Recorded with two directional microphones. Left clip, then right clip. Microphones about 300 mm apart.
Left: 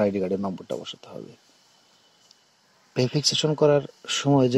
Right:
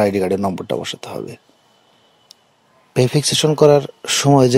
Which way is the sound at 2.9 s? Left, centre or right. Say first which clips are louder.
Right 7 dB; centre.